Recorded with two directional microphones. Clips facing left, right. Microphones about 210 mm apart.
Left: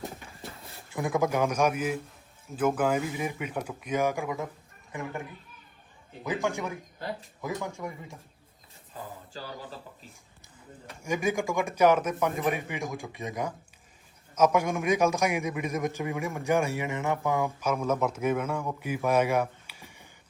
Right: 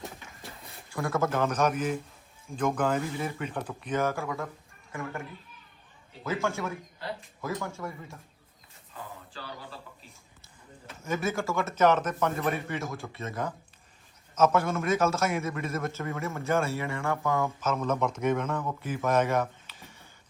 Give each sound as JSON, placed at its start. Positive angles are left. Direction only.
{"t": 0.9, "sound": "a man's voice", "side_deg": 20}
{"t": 6.2, "sound": "a man's voice", "side_deg": 15}
{"t": 9.3, "sound": "speech", "side_deg": 40}
{"t": 11.0, "sound": "a man's voice", "side_deg": 15}